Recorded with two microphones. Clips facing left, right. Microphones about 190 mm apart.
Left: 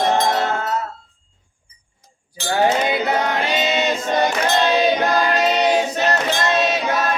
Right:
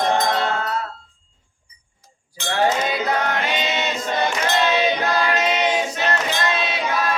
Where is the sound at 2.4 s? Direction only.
35° left (ahead or behind).